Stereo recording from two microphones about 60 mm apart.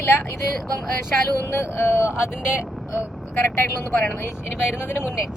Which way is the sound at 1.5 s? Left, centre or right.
Left.